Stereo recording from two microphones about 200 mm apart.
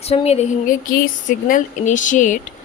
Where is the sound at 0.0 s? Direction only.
30° left (ahead or behind).